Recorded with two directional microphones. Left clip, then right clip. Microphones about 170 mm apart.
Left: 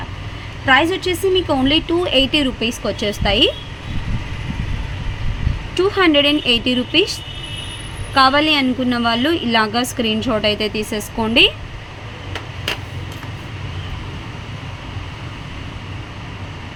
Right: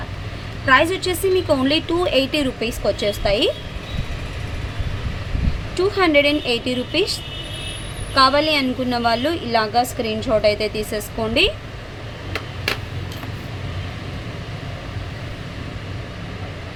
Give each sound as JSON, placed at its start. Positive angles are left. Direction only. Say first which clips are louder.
{"t": 0.6, "sound": "a woman's voice", "louder": "left 1 dB", "side_deg": 15}
{"t": 5.8, "sound": "a woman's voice", "louder": "left 2 dB", "side_deg": 15}
{"t": 8.1, "sound": "a woman's voice", "louder": "left 2 dB", "side_deg": 15}